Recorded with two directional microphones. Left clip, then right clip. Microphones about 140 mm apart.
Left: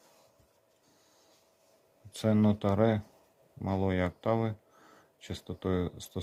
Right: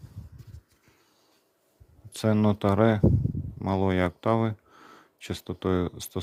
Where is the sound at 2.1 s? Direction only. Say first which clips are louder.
Right 4 dB; 35° right (ahead or behind).